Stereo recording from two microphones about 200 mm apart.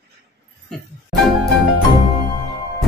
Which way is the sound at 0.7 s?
5° left (ahead or behind).